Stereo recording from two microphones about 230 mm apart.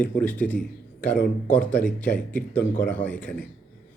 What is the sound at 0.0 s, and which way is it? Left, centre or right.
A man's voice, centre.